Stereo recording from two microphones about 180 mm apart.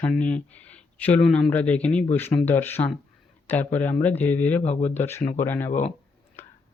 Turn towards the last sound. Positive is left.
turn(degrees=35)  # may be behind; listen again after turning